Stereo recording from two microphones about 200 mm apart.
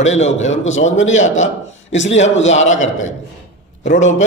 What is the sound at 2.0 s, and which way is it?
Speech, 70° left (ahead or behind).